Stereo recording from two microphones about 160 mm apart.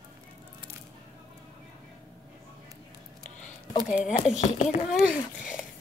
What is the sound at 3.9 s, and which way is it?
Speech, centre (ahead or behind).